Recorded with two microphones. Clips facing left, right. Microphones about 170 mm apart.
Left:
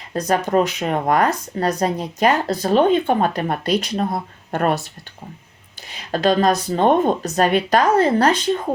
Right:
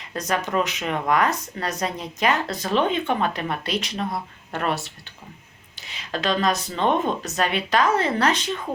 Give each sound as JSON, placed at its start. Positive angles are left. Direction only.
{"t": 0.1, "sound": "speech", "side_deg": 35}
{"t": 5.9, "sound": "speech", "side_deg": 40}